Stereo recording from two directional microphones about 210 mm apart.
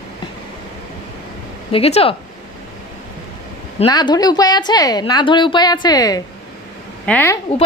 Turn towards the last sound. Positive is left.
turn(degrees=10)  # may be behind; listen again after turning